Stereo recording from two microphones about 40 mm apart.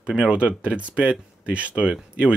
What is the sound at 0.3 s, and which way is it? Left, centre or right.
Speech, right.